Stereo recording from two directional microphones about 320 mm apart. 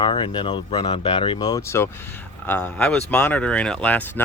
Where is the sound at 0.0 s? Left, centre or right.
Centre.